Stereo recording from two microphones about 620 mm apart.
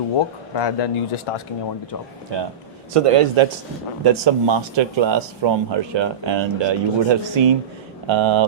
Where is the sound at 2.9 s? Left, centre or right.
Right.